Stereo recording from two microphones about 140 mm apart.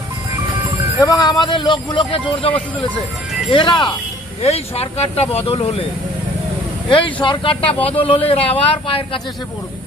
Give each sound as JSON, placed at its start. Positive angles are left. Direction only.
{"t": 1.0, "sound": "speech", "side_deg": 25}
{"t": 3.5, "sound": "speech", "side_deg": 35}
{"t": 4.4, "sound": "speech", "side_deg": 45}
{"t": 6.9, "sound": "speech", "side_deg": 35}